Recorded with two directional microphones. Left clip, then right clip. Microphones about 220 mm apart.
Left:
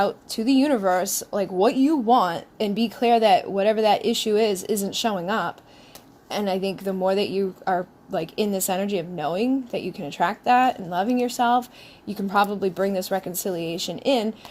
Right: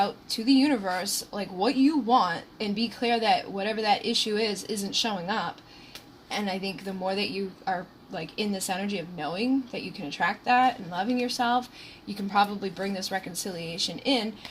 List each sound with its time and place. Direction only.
0.0 s a woman's voice: 45° left (ahead or behind)